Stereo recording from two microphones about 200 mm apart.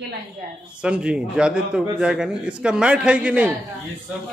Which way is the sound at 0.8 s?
5° right (ahead or behind).